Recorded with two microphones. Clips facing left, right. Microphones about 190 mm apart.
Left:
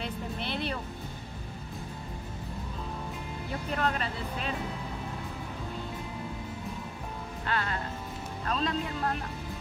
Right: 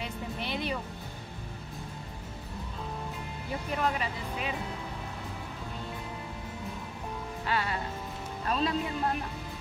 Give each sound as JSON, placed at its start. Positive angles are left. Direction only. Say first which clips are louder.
{"t": 0.0, "sound": "music", "louder": "left 1 dB", "side_deg": -10}
{"t": 3.7, "sound": "speech", "louder": "even", "side_deg": -10}
{"t": 7.4, "sound": "speech", "louder": "right 1 dB", "side_deg": -10}